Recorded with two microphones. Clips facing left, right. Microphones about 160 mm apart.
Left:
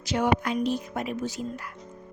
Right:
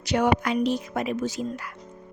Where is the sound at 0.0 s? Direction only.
70° right (ahead or behind).